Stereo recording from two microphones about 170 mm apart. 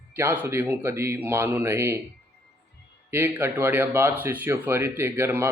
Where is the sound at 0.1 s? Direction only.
15° right (ahead or behind).